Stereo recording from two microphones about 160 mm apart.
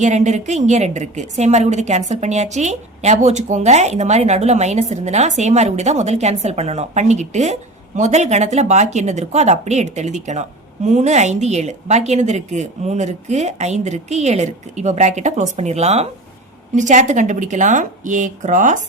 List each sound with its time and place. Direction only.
0.0 s a woman's voice: 45° right (ahead or behind)